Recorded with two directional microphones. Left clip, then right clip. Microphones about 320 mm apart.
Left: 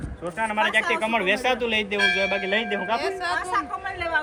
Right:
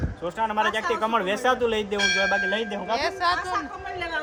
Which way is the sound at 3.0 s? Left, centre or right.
Right.